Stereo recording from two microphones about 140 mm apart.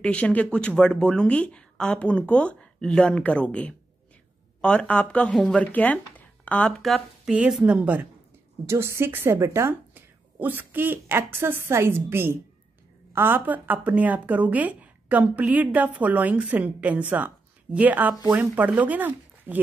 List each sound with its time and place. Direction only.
0.0 s a woman's voice: 10° left (ahead or behind); by 19.6 s 10° right (ahead or behind)